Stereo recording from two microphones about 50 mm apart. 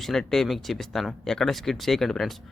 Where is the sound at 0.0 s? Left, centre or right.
Centre.